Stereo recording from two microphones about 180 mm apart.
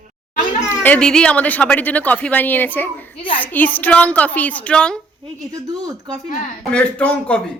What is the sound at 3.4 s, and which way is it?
Speech, 10° left (ahead or behind).